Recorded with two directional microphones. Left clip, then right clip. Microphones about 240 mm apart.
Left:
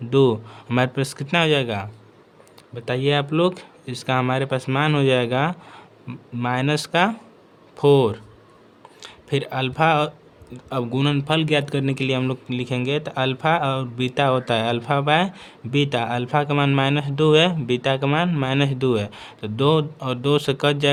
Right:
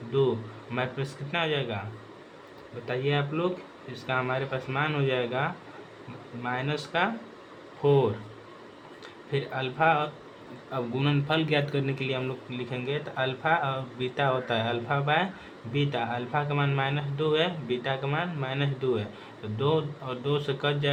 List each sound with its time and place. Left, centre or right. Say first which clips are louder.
0.7 s speech: left 10 dB; left
2.8 s speech: left 7 dB; left
9.3 s speech: left 7 dB; left